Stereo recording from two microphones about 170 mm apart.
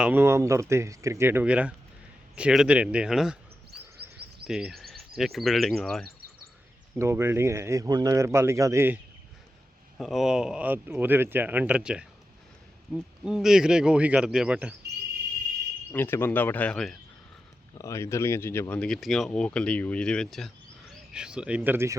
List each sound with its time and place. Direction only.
0.0 s speech: 10° right (ahead or behind)
4.0 s a sound: 15° right (ahead or behind)
4.4 s speech: 5° right (ahead or behind)
6.9 s speech: 15° right (ahead or behind)
10.0 s speech: centre (ahead or behind)
15.9 s speech: 15° left (ahead or behind)
17.7 s speech: 15° left (ahead or behind); by 21.9 s 15° right (ahead or behind)